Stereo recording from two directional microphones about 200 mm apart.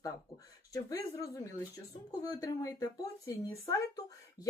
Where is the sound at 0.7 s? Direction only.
15° left (ahead or behind).